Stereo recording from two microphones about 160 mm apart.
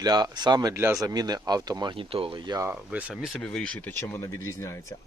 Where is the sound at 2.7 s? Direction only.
10° right (ahead or behind); by 4.0 s 5° left (ahead or behind).